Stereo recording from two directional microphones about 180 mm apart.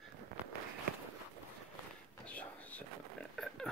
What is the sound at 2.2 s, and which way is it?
Whispering, 10° left (ahead or behind).